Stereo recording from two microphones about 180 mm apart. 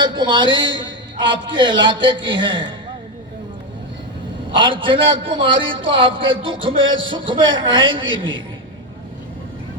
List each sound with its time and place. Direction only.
0.0 s a man's voice: 25° right (ahead or behind)
4.5 s a man's voice: 30° right (ahead or behind)